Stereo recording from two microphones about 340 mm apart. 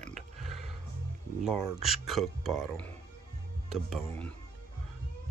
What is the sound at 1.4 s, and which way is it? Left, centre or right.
Speech, centre.